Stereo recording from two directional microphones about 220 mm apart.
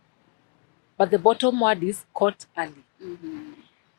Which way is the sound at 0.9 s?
20° left (ahead or behind).